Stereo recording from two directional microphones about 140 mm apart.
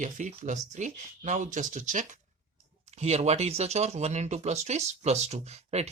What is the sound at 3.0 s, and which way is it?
Speech, 50° right (ahead or behind).